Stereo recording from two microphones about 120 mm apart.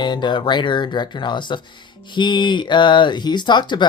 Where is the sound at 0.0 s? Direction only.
40° left (ahead or behind).